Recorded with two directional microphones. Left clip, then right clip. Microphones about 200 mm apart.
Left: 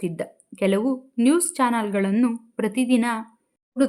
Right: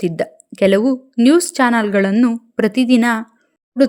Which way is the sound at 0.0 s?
25° right (ahead or behind).